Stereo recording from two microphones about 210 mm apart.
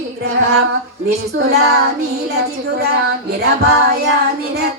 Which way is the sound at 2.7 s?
50° right (ahead or behind).